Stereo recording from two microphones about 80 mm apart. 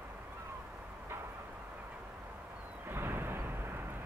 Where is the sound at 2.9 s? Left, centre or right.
Right.